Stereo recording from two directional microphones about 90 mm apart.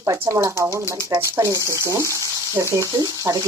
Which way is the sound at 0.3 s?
30° right (ahead or behind).